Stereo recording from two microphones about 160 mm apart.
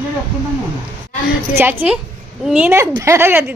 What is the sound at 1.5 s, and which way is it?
A woman's voice, 15° right (ahead or behind).